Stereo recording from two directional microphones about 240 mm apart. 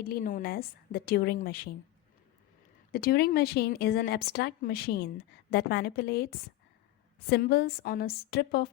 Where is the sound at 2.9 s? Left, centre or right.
Left.